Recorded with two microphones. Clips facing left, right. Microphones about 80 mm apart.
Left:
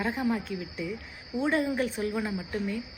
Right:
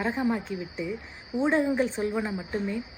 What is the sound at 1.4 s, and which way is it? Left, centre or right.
Speech, right.